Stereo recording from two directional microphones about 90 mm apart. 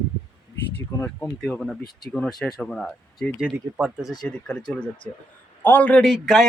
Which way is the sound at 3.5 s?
15° right (ahead or behind).